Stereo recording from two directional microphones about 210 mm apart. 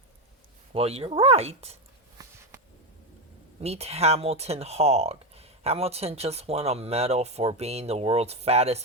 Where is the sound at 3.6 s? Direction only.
30° right (ahead or behind).